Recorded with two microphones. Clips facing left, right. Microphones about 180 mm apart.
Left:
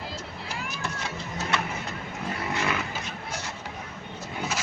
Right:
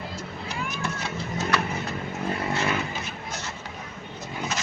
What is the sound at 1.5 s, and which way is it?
Bird, 25° left (ahead or behind).